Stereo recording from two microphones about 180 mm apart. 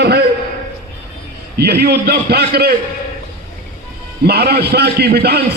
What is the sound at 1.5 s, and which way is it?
A man's voice, 65° right (ahead or behind).